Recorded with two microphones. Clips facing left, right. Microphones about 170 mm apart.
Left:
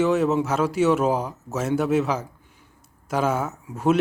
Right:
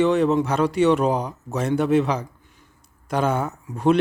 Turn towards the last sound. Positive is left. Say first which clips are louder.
# right 2 dB
turn(degrees=5)  # may be behind; listen again after turning